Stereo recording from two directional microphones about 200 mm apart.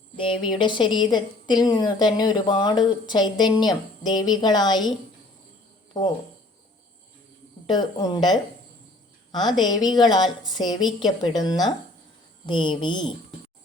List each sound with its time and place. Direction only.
0.2 s a woman's voice: 25° left (ahead or behind)
7.7 s a woman's voice: 20° left (ahead or behind)
9.6 s a woman's voice: 20° left (ahead or behind)